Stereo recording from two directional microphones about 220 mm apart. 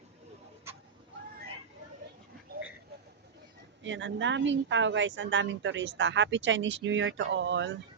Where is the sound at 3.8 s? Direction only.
55° right (ahead or behind).